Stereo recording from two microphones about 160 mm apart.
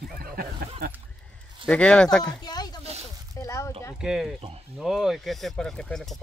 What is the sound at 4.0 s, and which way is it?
Speech, 5° right (ahead or behind).